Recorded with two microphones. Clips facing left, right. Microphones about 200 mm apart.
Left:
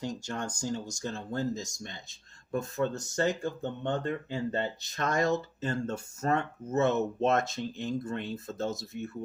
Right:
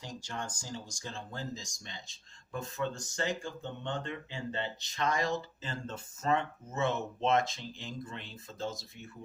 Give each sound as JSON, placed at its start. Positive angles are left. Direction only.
{"t": 0.0, "sound": "speech", "side_deg": 45}
{"t": 4.3, "sound": "speech", "side_deg": 40}